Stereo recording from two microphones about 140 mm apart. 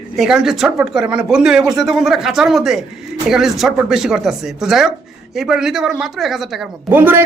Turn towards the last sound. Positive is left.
turn(degrees=-15)  # may be behind; listen again after turning